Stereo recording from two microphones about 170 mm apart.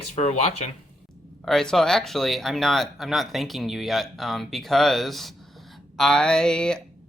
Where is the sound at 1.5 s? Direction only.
5° left (ahead or behind).